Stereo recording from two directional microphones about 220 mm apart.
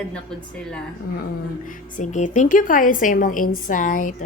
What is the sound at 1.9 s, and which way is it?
A woman's voice, 35° left (ahead or behind).